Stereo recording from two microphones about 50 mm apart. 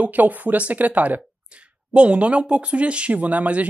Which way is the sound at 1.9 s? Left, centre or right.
Right.